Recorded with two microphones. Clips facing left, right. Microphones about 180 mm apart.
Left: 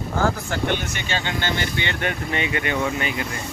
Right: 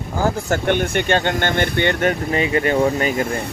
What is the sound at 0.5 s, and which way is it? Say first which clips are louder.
Speech: right 6 dB; 55° right (ahead or behind).